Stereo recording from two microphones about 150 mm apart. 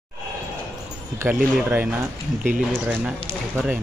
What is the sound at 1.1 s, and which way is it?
Speech, 15° right (ahead or behind).